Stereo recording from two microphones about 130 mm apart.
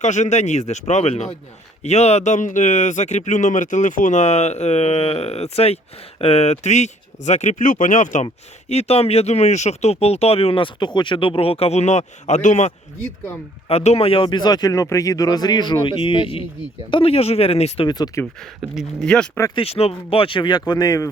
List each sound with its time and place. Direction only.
0.0 s speech: 65° left (ahead or behind)
8.7 s speech: 55° left (ahead or behind)
13.7 s speech: 55° left (ahead or behind)
17.8 s speech: 30° left (ahead or behind)
18.7 s speech: centre (ahead or behind)
19.5 s speech: 50° left (ahead or behind); by 21.1 s 25° left (ahead or behind)